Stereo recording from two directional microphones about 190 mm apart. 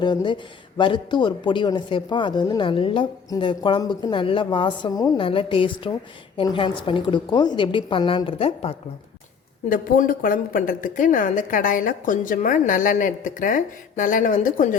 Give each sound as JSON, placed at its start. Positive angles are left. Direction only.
{"t": 0.0, "sound": "speech", "side_deg": 25}
{"t": 9.6, "sound": "a woman's voice", "side_deg": 45}